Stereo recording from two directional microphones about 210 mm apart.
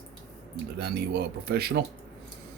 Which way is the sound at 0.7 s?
50° right (ahead or behind).